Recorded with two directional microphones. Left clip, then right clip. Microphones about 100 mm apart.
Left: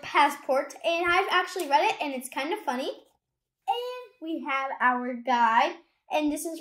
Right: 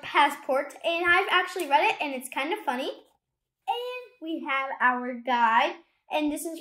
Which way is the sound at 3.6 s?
5° right (ahead or behind).